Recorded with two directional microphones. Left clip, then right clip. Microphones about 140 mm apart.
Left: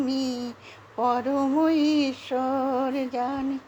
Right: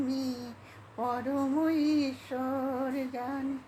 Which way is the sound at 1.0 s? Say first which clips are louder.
Left 8 dB; 40° left (ahead or behind).